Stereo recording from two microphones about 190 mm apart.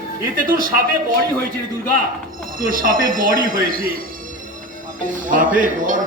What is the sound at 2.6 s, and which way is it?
Speech, 50° right (ahead or behind).